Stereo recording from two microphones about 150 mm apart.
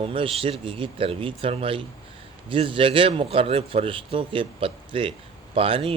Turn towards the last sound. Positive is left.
turn(degrees=-40)  # may be behind; listen again after turning